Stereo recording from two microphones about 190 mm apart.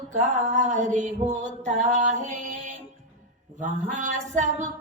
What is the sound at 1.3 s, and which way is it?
Music, 40° right (ahead or behind).